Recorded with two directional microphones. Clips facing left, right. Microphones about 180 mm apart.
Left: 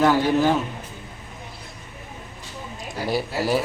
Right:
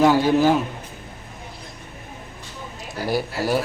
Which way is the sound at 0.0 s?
10° right (ahead or behind).